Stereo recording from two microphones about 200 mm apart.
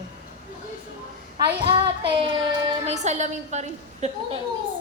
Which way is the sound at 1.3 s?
25° right (ahead or behind).